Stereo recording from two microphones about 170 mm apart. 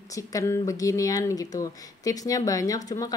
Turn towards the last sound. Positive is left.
turn(degrees=20)  # may be behind; listen again after turning